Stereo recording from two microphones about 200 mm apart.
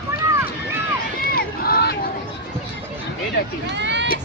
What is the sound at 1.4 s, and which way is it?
Run, 50° left (ahead or behind).